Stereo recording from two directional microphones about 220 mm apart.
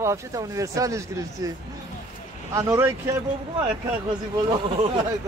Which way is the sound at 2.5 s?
15° right (ahead or behind).